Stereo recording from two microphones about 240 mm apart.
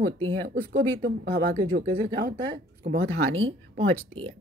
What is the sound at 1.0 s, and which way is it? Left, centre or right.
Speech, right.